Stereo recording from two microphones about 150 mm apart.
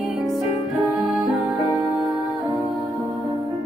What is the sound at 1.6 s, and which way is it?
Music, 20° right (ahead or behind).